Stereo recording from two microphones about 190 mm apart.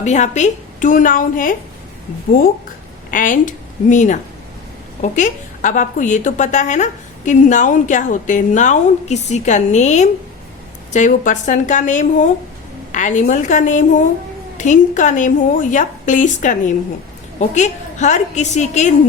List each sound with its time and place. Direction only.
0.0 s a woman's voice: 40° left (ahead or behind)
3.1 s a woman's voice: 45° left (ahead or behind)